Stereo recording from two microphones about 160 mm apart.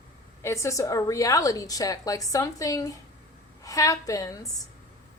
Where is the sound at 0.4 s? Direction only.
20° left (ahead or behind).